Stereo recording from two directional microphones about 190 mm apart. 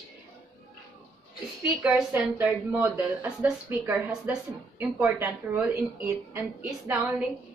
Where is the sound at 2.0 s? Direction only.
10° right (ahead or behind).